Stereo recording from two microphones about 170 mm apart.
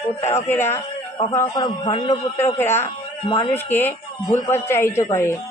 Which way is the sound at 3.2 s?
30° left (ahead or behind).